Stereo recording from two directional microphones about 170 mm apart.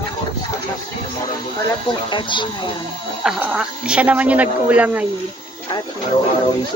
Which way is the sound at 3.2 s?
5° right (ahead or behind).